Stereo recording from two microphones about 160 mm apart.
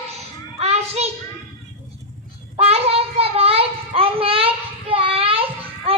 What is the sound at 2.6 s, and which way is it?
Child singing, 40° right (ahead or behind).